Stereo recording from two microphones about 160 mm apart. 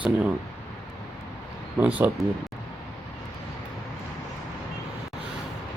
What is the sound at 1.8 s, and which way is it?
Speech, 10° right (ahead or behind).